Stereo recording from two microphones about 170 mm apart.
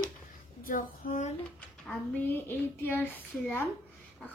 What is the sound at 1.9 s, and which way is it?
A woman's voice, 10° left (ahead or behind).